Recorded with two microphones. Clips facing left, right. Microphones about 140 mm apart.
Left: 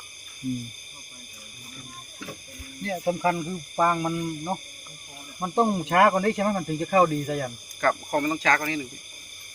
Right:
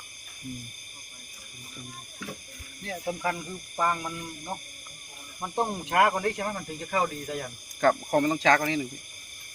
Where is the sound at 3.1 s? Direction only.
45° left (ahead or behind).